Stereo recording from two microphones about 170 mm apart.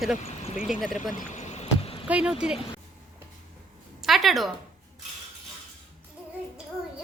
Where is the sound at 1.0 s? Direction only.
50° left (ahead or behind).